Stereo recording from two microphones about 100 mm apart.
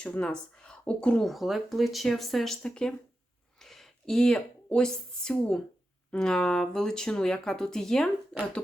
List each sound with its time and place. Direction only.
0.0 s speech: 10° left (ahead or behind)